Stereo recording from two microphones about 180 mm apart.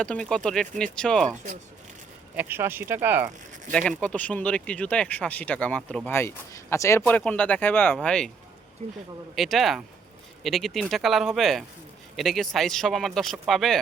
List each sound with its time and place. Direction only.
0.0 s speech: 5° left (ahead or behind)
2.3 s speech: 10° right (ahead or behind)
3.7 s speech: 5° left (ahead or behind)
8.8 s speech: 40° right (ahead or behind)
9.3 s speech: centre (ahead or behind)